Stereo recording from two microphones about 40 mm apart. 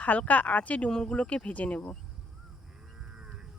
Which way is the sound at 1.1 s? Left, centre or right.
Left.